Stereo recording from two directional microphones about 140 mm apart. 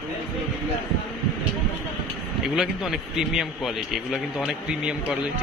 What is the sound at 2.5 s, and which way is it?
A man's voice, 5° right (ahead or behind).